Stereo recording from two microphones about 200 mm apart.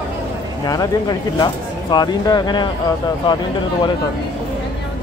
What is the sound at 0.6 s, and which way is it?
Speech, 20° left (ahead or behind).